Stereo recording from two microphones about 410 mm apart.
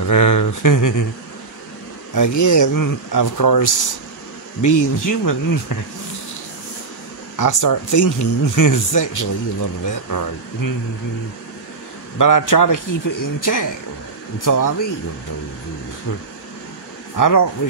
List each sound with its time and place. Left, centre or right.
0.0 s speech: left
2.1 s speech: left
7.3 s speech: left
12.2 s speech: left
17.2 s speech: left